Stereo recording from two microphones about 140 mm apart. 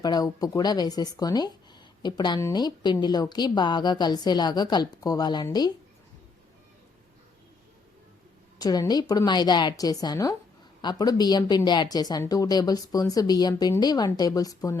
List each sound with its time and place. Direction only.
0.0 s a woman's voice: 30° left (ahead or behind)
8.5 s speech: 25° left (ahead or behind)